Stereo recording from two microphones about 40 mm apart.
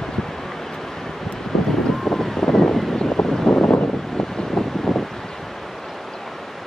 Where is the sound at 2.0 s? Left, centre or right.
Centre.